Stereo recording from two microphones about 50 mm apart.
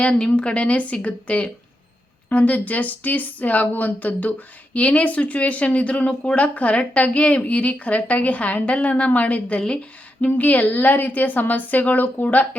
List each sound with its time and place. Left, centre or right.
0.0 s a woman's voice: centre; by 12.5 s left